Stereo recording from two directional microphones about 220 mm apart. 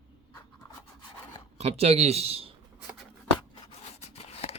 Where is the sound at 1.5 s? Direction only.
30° right (ahead or behind).